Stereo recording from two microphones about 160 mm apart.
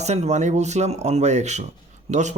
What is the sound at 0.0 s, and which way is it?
Speech, 45° right (ahead or behind).